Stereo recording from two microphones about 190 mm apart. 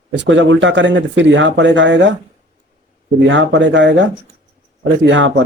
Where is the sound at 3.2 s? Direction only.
75° right (ahead or behind).